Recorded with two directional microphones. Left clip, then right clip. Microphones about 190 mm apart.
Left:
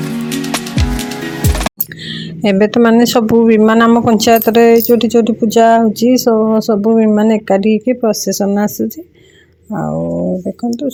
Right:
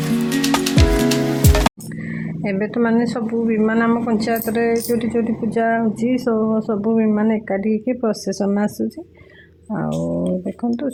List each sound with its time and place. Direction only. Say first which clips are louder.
0.0 s music: even; centre (ahead or behind)
2.0 s a sound: left 10 dB; 35° left (ahead or behind)
3.0 s speech: left 11 dB; 35° left (ahead or behind)
3.6 s speech: left 9 dB; 30° left (ahead or behind)
6.6 s speech: left 8 dB; 30° left (ahead or behind); by 10.1 s 10° left (ahead or behind)